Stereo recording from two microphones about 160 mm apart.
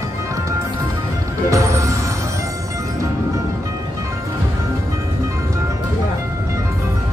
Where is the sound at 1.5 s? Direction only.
20° right (ahead or behind).